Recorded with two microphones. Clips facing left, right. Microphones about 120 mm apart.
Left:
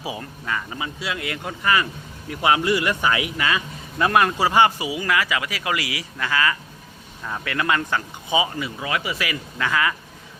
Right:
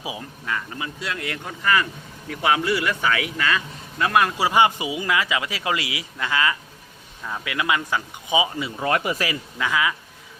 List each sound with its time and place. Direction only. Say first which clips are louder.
0.0 s speech: left 2 dB; 10° right (ahead or behind)
0.4 s speech: left 1 dB; 5° left (ahead or behind)
4.4 s a man's voice: left 1 dB; 15° right (ahead or behind)
8.8 s speech: right 5 dB; 45° right (ahead or behind)
9.6 s speech: left 1 dB; 10° right (ahead or behind)